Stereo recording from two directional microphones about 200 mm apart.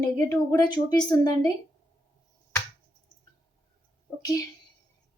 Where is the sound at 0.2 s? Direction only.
20° left (ahead or behind).